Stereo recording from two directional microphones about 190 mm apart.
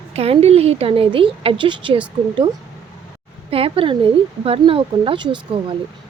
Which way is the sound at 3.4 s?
30° right (ahead or behind).